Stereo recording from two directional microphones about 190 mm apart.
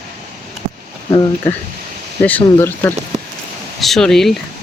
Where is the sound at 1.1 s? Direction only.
20° left (ahead or behind).